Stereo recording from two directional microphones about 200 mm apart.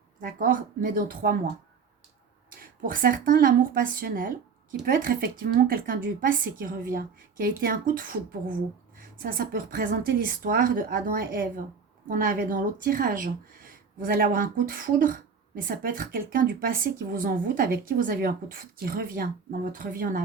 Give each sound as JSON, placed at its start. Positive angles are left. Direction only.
{"t": 0.2, "sound": "speech", "side_deg": -40}
{"t": 2.6, "sound": "speech", "side_deg": -45}